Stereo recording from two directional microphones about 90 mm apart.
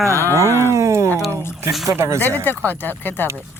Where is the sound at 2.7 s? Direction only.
20° left (ahead or behind).